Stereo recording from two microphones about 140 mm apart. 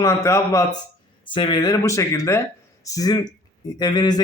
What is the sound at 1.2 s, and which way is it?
Speech, 35° left (ahead or behind).